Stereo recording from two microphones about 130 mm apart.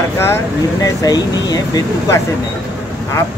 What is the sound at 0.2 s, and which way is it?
Speech, 20° left (ahead or behind).